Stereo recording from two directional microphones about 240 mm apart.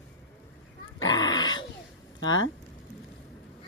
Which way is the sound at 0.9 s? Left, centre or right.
Centre.